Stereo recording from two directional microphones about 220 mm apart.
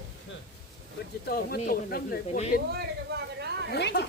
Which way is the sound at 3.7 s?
50° left (ahead or behind).